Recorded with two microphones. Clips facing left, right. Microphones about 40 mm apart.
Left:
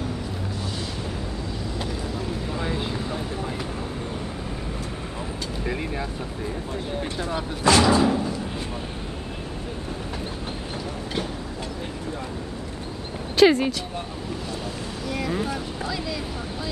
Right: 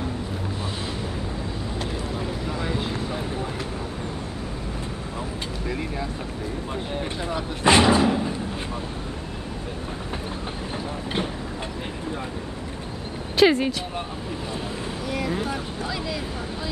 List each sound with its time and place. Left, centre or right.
2.5 s vehicle: centre
5.7 s vehicle: centre
7.6 s speech: right
13.4 s speech: centre
15.1 s vehicle: centre